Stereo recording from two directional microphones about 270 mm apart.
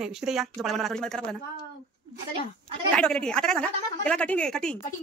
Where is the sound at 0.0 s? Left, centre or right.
Centre.